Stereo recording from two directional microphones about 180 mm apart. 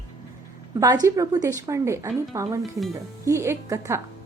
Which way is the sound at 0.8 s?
20° right (ahead or behind).